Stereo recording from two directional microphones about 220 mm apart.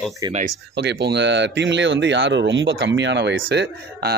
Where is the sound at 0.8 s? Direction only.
50° right (ahead or behind).